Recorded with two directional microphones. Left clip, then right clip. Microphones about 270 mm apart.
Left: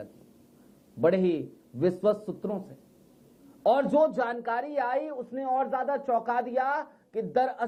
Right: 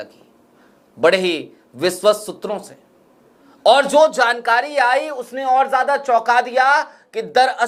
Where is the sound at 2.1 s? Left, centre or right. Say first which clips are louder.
Right 8 dB; right.